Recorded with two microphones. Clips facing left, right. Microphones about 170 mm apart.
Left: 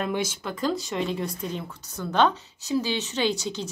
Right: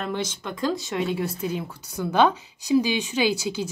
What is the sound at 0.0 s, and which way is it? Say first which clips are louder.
Speech: left 1 dB; 10° left (ahead or behind).